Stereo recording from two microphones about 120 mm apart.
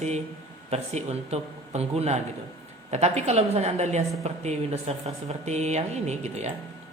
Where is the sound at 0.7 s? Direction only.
65° right (ahead or behind).